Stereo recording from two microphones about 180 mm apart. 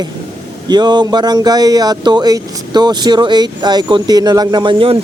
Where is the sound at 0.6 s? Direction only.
25° right (ahead or behind).